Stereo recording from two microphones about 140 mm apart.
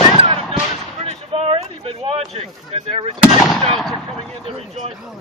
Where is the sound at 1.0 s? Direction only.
50° right (ahead or behind).